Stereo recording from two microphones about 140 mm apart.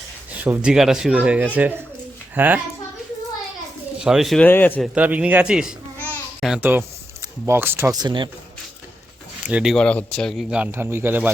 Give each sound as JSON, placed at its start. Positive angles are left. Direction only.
{"t": 0.3, "sound": "speech", "side_deg": -10}
{"t": 4.0, "sound": "speech", "side_deg": -5}
{"t": 4.4, "sound": "a man's voice", "side_deg": 15}
{"t": 4.9, "sound": "speech", "side_deg": -10}
{"t": 7.9, "sound": "speech", "side_deg": -30}
{"t": 9.5, "sound": "speech", "side_deg": -10}
{"t": 9.7, "sound": "a man's voice", "side_deg": 10}